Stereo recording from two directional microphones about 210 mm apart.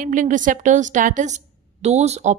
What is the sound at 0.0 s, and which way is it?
A woman's voice, 40° right (ahead or behind).